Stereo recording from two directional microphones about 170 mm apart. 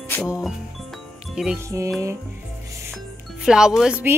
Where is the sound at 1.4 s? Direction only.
5° right (ahead or behind).